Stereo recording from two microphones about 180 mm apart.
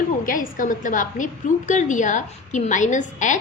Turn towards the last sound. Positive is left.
turn(degrees=45)  # may be behind; listen again after turning